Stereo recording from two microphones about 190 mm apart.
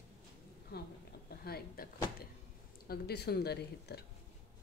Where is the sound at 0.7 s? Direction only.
55° left (ahead or behind).